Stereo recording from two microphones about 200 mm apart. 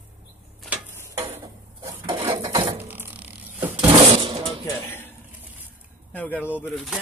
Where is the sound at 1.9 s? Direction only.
25° right (ahead or behind).